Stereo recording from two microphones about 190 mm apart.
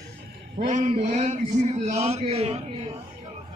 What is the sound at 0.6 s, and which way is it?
A man's voice, 40° right (ahead or behind).